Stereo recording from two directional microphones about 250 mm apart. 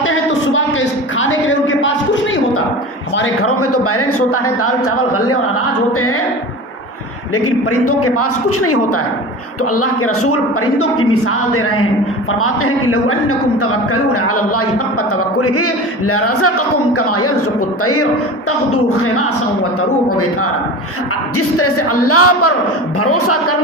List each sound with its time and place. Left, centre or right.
0.0 s a sound: left
3.2 s a man's voice: left
7.3 s a man's voice: left
21.3 s a man's voice: left